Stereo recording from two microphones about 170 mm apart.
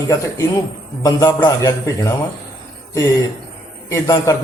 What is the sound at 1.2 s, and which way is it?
Speech, 20° left (ahead or behind).